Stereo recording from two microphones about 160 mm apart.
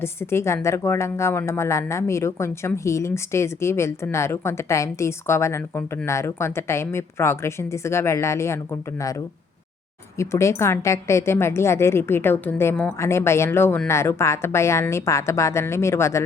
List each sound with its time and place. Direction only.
0.0 s a woman's voice: 15° left (ahead or behind)